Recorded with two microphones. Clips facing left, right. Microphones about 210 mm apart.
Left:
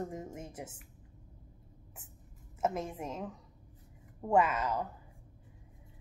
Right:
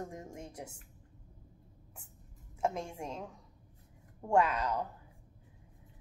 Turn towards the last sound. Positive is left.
turn(degrees=5)  # may be behind; listen again after turning